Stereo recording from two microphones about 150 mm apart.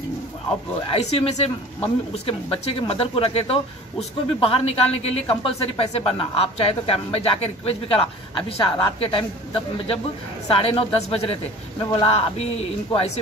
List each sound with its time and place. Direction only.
0.8 s a woman's voice: 40° left (ahead or behind)